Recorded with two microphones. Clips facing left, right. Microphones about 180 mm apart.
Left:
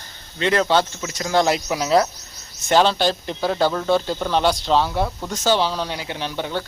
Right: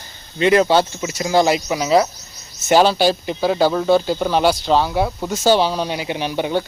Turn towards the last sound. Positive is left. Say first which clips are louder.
# right 6 dB
turn(degrees=-15)  # may be behind; listen again after turning